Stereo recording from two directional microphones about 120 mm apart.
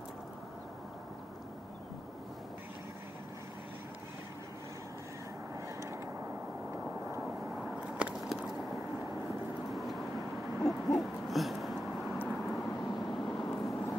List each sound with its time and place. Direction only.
5.8 s vehicle: 25° right (ahead or behind)
7.2 s a sound: 5° right (ahead or behind)
8.7 s vehicle: 25° right (ahead or behind)
9.7 s vehicle: centre (ahead or behind)
10.6 s owl: centre (ahead or behind)
12.3 s vehicle: centre (ahead or behind)
12.6 s vehicle: 30° left (ahead or behind)
12.9 s vehicle: centre (ahead or behind)
13.3 s vehicle: 30° left (ahead or behind)
13.6 s vehicle: centre (ahead or behind)